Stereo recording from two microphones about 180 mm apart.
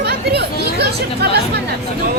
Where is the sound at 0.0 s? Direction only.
65° right (ahead or behind).